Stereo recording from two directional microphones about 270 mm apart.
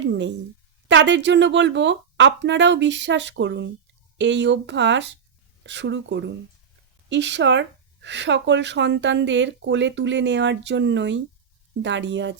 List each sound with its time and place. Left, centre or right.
0.0 s speech: right